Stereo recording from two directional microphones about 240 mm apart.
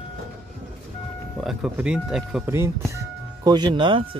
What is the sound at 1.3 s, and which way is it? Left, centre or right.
Speech, centre.